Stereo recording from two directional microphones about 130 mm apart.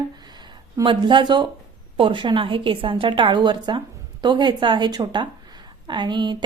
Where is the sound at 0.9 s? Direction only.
40° right (ahead or behind).